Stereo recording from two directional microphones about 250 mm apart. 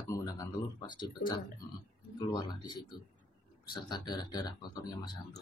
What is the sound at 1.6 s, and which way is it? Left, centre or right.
Speech, centre.